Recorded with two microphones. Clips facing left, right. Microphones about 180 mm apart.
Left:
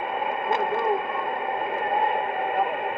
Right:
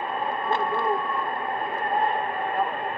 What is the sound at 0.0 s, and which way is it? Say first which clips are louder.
Radio: left 1 dB; 15° left (ahead or behind).